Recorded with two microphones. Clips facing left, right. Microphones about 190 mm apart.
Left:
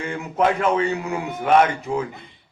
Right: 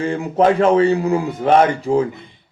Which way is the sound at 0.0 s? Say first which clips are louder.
Right 6 dB; 35° right (ahead or behind).